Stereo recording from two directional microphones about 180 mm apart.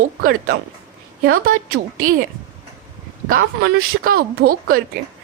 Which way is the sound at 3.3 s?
55° right (ahead or behind).